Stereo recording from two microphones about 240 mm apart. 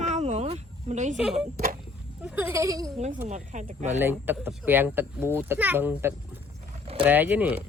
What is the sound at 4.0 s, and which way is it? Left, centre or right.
Speech, centre.